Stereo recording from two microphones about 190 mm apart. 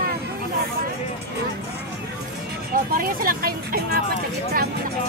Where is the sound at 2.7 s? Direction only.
50° right (ahead or behind).